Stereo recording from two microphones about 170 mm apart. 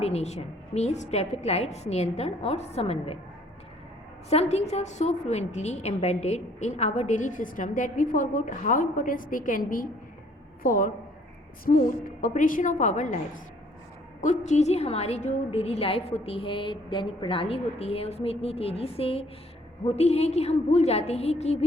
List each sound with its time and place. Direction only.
0.0 s a woman's voice: 40° left (ahead or behind)
4.3 s a woman's voice: 40° left (ahead or behind)